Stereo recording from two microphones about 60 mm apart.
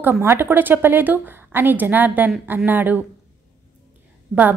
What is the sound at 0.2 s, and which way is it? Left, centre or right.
A woman's voice, right.